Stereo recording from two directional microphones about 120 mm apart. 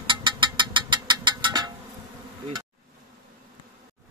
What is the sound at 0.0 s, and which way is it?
Vehicle, 40° right (ahead or behind).